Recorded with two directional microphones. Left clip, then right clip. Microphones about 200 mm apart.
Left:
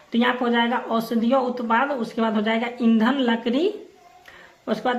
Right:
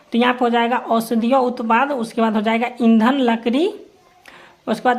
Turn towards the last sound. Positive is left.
turn(degrees=-40)  # may be behind; listen again after turning